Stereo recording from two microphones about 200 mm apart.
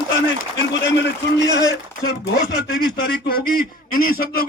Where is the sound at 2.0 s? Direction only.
55° left (ahead or behind).